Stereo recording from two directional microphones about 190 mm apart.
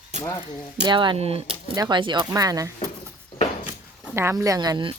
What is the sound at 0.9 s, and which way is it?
Speech, 25° right (ahead or behind).